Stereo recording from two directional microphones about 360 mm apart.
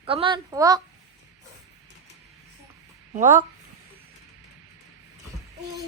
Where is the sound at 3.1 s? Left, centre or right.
Right.